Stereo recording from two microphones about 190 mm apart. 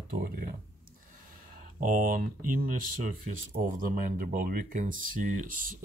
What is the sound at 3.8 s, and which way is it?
Speech, 45° right (ahead or behind).